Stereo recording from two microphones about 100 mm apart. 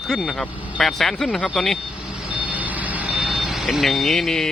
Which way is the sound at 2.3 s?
15° right (ahead or behind).